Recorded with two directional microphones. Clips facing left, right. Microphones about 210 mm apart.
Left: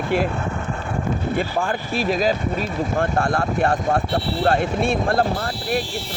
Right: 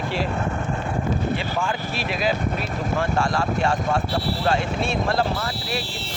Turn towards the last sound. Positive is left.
turn(degrees=55)  # may be behind; listen again after turning